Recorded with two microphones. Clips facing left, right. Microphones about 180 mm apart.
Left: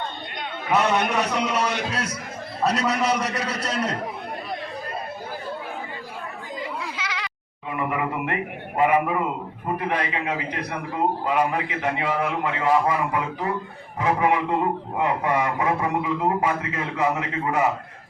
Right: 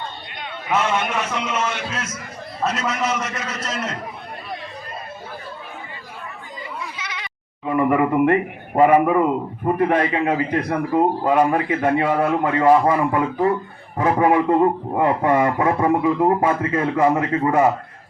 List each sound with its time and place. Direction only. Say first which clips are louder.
0.7 s a man's voice: even; 40° left (ahead or behind)
6.9 s baby cry: left 2 dB; 90° left
7.6 s a man's voice: right 9 dB; 45° right (ahead or behind)